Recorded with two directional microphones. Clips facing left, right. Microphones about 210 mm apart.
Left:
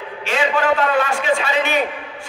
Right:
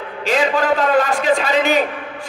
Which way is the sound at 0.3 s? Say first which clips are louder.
Right 2 dB; 40° right (ahead or behind).